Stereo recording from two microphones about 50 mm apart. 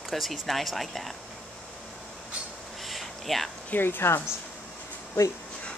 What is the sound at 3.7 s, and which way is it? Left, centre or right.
Speech, left.